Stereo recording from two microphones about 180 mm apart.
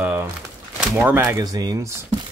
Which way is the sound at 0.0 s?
10° right (ahead or behind).